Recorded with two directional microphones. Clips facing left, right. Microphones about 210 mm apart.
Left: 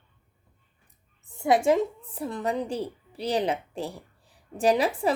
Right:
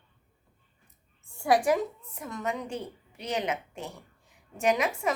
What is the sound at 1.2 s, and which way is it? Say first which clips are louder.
A woman's voice: left 2 dB; 20° left (ahead or behind).